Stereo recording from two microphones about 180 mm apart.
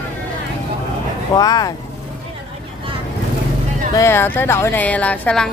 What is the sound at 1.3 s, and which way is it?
Speech, 20° left (ahead or behind).